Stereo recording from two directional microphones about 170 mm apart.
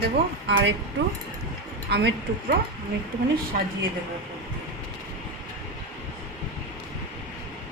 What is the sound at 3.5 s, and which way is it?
Speech, 60° right (ahead or behind).